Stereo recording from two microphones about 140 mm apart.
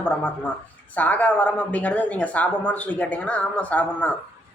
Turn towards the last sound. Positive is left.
turn(degrees=10)  # may be behind; listen again after turning